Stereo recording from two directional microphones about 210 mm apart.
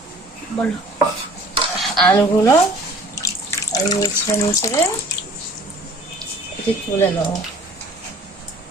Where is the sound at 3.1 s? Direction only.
15° left (ahead or behind).